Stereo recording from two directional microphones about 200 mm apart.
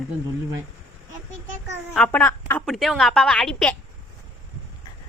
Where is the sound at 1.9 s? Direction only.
5° left (ahead or behind).